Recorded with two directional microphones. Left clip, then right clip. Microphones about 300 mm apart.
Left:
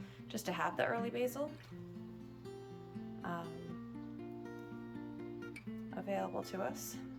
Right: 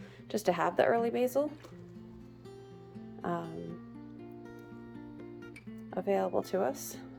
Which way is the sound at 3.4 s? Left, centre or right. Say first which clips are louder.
Right 5 dB; centre.